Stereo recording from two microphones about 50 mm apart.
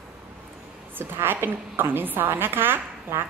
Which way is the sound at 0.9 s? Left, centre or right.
Right.